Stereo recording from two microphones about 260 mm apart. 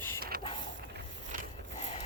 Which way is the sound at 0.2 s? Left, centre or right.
Right.